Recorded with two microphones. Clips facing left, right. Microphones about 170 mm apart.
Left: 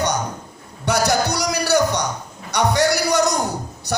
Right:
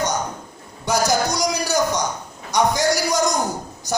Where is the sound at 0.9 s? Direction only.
65° left (ahead or behind).